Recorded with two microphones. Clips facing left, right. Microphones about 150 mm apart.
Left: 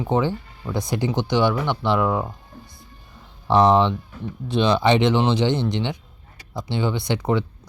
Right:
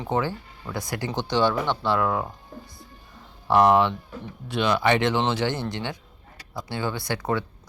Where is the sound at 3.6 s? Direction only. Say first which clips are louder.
Left 2 dB; 20° left (ahead or behind).